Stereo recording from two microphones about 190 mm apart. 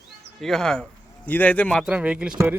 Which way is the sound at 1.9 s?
5° right (ahead or behind).